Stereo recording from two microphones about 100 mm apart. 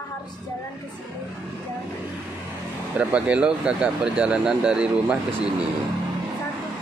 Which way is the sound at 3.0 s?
10° right (ahead or behind).